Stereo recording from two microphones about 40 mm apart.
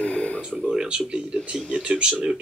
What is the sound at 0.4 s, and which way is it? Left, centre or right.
Speech, right.